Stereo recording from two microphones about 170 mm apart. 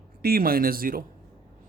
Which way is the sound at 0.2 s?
60° right (ahead or behind).